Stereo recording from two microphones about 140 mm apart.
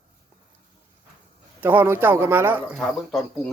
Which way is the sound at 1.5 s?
15° right (ahead or behind).